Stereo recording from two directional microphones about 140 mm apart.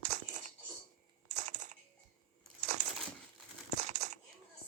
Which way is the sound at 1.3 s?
60° right (ahead or behind).